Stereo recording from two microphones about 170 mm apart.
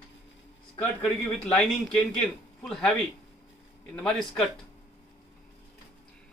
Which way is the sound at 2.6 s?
5° left (ahead or behind).